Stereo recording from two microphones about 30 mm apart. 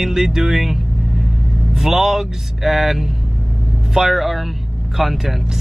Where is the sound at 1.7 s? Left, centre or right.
Centre.